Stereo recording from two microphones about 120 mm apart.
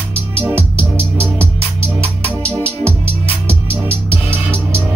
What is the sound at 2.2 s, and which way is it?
Organ, 10° left (ahead or behind).